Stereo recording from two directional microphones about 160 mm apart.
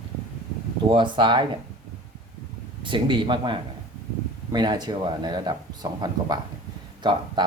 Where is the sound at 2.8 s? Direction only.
30° right (ahead or behind).